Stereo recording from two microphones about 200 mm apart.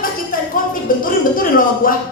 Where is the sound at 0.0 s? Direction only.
45° left (ahead or behind).